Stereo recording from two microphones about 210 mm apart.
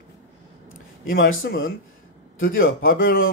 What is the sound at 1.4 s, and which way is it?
Speech, 65° left (ahead or behind).